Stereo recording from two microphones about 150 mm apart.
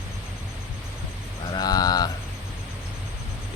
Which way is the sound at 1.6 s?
25° left (ahead or behind).